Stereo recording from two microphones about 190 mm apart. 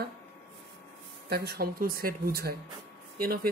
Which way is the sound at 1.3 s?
55° right (ahead or behind).